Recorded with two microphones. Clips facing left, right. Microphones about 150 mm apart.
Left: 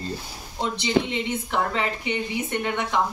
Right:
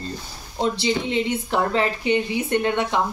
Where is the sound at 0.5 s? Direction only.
30° right (ahead or behind).